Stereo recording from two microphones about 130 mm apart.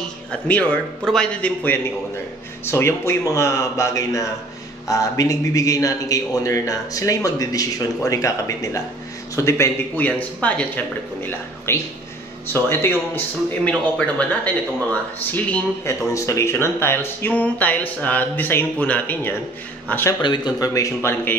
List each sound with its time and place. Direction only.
0.3 s a man's voice: 10° left (ahead or behind)
20.2 s a man's voice: 35° left (ahead or behind); by 21.4 s 15° left (ahead or behind)